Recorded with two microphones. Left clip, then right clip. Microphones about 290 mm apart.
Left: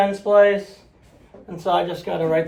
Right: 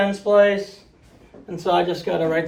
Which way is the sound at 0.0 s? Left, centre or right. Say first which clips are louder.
Left 1 dB; left.